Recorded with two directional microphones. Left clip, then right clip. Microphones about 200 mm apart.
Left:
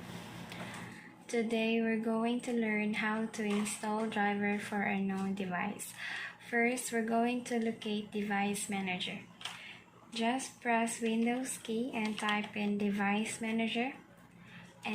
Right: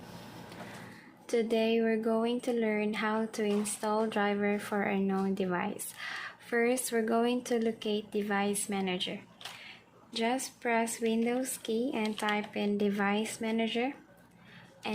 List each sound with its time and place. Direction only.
1.3 s speech: 55° right (ahead or behind)
10.2 s speech: 55° right (ahead or behind)